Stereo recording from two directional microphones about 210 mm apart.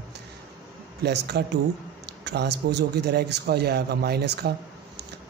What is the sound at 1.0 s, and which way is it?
A man's voice, 50° right (ahead or behind).